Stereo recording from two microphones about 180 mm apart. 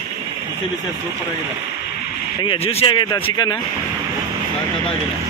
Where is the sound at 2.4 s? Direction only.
30° left (ahead or behind).